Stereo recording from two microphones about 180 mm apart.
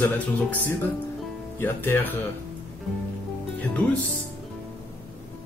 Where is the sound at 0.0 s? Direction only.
10° left (ahead or behind).